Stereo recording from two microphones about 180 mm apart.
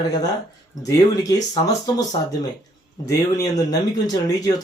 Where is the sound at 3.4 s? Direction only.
20° left (ahead or behind).